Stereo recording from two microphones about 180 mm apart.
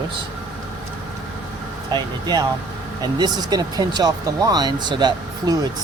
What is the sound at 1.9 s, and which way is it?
Speech, 25° right (ahead or behind).